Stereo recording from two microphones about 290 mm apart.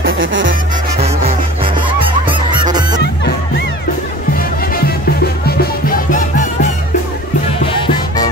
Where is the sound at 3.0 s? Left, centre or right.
Left.